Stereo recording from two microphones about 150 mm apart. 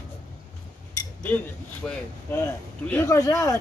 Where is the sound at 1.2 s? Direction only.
10° left (ahead or behind).